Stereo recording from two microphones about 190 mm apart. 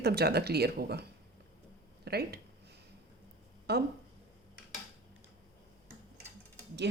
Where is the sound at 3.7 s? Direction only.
60° right (ahead or behind).